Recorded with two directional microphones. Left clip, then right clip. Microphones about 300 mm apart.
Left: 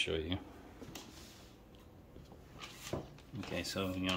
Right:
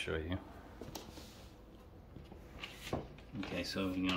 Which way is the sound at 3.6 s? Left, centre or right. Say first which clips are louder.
Right 1 dB; left.